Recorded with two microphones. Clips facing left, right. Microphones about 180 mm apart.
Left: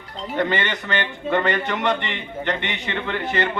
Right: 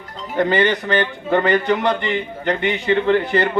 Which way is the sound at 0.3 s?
35° right (ahead or behind).